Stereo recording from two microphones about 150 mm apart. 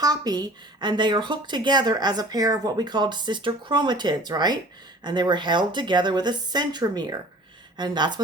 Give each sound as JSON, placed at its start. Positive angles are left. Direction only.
{"t": 0.0, "sound": "a woman's voice", "side_deg": -25}